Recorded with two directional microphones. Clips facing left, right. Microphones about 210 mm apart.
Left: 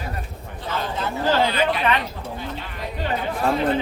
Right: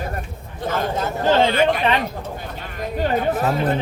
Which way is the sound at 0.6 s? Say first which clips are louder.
Right 4 dB; 50° right (ahead or behind).